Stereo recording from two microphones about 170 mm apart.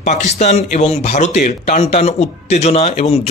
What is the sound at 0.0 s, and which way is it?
Speech, 40° left (ahead or behind).